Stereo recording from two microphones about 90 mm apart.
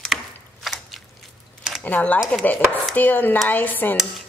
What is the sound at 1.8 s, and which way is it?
Dishes, 20° left (ahead or behind).